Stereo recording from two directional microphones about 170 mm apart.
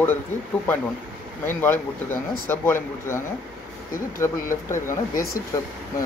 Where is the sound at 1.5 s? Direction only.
10° left (ahead or behind).